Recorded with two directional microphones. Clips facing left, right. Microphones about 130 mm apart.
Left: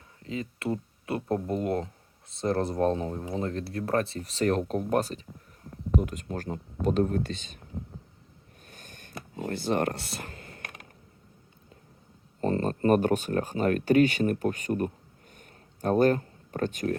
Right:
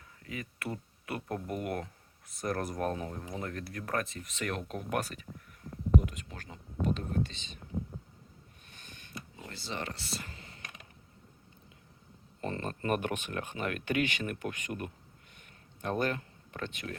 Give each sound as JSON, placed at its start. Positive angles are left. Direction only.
{"t": 0.2, "sound": "speech", "side_deg": 25}
{"t": 6.1, "sound": "speech", "side_deg": 45}
{"t": 8.6, "sound": "a sound", "side_deg": 45}
{"t": 12.4, "sound": "speech", "side_deg": 35}